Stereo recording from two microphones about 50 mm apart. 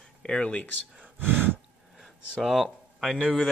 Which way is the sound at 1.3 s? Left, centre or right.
Right.